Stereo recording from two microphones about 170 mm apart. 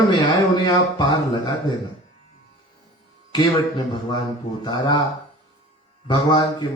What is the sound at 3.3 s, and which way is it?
Speech, 25° left (ahead or behind).